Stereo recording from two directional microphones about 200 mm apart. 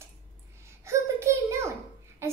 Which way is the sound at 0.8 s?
15° right (ahead or behind).